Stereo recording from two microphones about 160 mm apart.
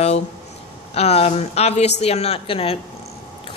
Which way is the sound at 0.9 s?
40° left (ahead or behind).